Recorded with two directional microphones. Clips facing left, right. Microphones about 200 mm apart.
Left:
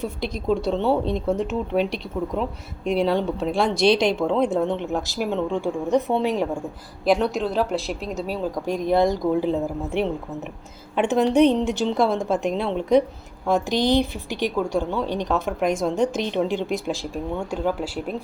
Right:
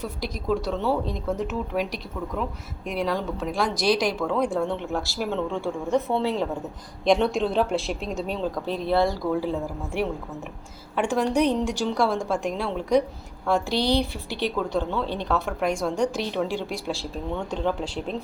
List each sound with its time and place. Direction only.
0.0 s a woman's voice: 25° left (ahead or behind); by 18.2 s 10° left (ahead or behind)